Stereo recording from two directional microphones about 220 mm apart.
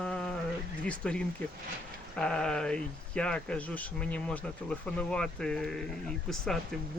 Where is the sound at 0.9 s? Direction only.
5° left (ahead or behind).